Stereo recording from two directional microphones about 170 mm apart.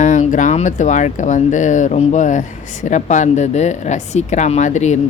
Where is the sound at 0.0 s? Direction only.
45° left (ahead or behind).